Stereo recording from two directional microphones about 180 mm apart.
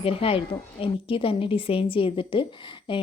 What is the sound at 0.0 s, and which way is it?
A woman's voice, 30° left (ahead or behind).